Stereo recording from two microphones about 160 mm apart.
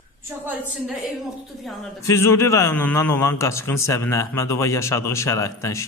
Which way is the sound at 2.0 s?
15° left (ahead or behind).